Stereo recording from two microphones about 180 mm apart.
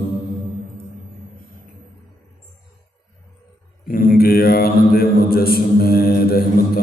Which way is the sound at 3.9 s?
55° left (ahead or behind).